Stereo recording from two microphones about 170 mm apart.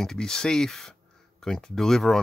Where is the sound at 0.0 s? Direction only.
5° left (ahead or behind).